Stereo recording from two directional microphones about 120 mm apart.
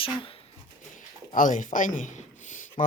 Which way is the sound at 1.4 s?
90° left.